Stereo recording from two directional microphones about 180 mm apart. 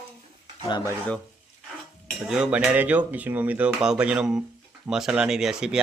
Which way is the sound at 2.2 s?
5° right (ahead or behind).